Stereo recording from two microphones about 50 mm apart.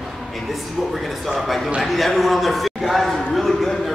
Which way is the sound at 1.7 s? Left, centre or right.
Centre.